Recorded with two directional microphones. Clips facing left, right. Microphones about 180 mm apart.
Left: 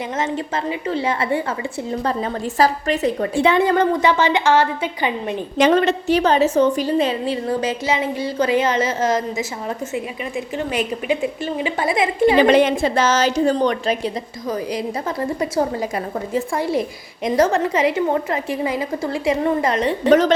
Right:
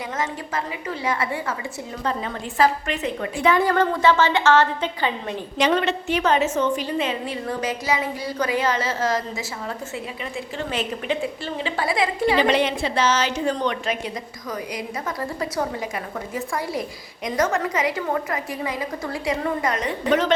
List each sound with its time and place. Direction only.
0.2 s a woman's voice: 25° left (ahead or behind)
5.5 s a woman's voice: 45° left (ahead or behind); by 12.4 s 20° left (ahead or behind)
12.4 s a woman's voice: 50° left (ahead or behind); by 19.9 s 30° left (ahead or behind)
20.1 s a woman's voice: 40° left (ahead or behind)